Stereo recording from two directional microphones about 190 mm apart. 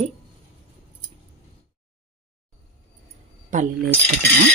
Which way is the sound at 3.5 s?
40° right (ahead or behind).